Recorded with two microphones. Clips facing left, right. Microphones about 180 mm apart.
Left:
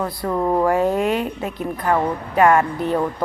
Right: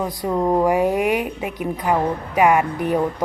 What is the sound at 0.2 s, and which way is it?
A woman's voice, 15° right (ahead or behind).